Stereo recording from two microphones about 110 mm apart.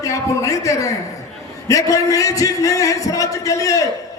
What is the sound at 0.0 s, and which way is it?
A man's voice, 30° left (ahead or behind).